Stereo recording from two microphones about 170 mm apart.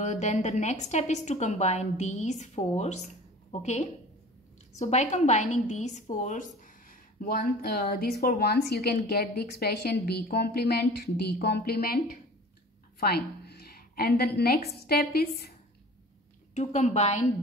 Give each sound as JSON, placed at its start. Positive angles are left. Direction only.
{"t": 0.0, "sound": "a woman's voice", "side_deg": 40}
{"t": 13.0, "sound": "a woman's voice", "side_deg": 65}
{"t": 16.5, "sound": "a woman's voice", "side_deg": 45}